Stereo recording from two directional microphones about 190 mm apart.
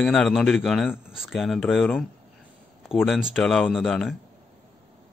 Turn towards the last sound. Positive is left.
turn(degrees=0)  # may be behind; listen again after turning